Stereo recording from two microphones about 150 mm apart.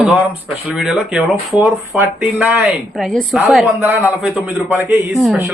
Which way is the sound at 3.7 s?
15° right (ahead or behind).